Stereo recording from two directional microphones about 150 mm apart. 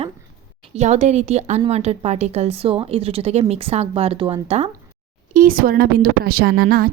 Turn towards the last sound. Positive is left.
turn(degrees=-80)